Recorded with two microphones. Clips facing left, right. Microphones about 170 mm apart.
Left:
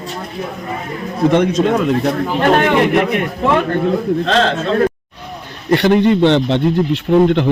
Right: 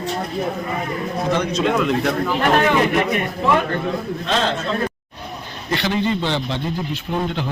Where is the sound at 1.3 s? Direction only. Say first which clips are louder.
Left 7 dB; 55° left (ahead or behind).